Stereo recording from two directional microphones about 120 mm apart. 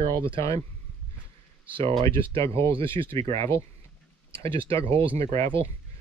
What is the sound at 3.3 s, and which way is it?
Speech, 25° left (ahead or behind).